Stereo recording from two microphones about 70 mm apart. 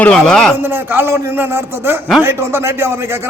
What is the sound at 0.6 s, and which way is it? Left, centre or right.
A man's voice, right.